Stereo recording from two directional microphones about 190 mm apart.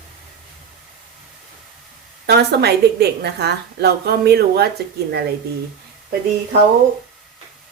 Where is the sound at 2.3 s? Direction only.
60° right (ahead or behind).